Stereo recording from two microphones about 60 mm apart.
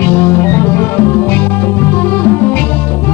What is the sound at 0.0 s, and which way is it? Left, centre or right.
Music, left.